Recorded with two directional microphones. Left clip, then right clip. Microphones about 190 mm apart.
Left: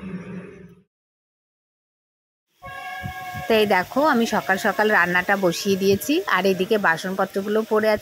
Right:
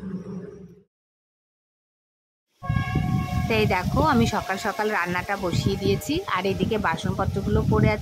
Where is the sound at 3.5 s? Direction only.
20° left (ahead or behind).